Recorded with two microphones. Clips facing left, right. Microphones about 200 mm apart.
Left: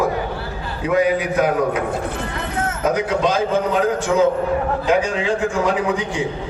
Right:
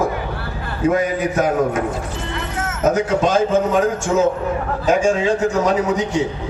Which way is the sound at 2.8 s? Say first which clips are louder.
Right 3 dB; 45° right (ahead or behind).